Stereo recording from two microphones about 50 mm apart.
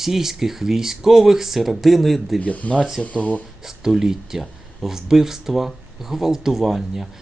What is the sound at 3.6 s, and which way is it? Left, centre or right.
Speech, centre.